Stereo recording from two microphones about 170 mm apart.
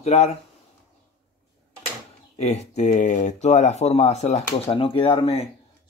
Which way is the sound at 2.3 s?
40° left (ahead or behind).